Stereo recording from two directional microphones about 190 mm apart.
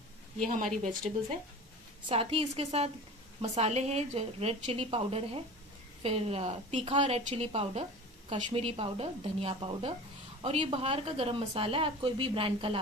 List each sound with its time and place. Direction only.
0.7 s speech: 5° left (ahead or behind)
2.0 s a woman's voice: 30° right (ahead or behind)